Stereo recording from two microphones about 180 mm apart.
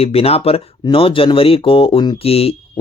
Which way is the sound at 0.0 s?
35° left (ahead or behind).